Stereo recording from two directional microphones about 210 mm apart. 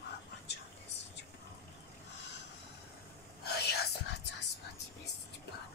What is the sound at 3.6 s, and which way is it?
Whispering, 50° left (ahead or behind).